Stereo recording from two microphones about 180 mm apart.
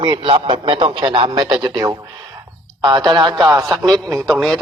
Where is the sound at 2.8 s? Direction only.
25° right (ahead or behind).